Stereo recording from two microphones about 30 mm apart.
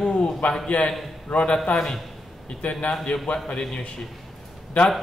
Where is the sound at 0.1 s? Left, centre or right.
Left.